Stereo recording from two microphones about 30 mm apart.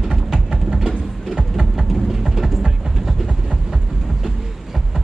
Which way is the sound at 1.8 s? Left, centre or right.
Centre.